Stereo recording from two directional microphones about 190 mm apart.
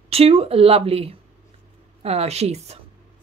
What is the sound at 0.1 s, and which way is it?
Speech, 30° right (ahead or behind).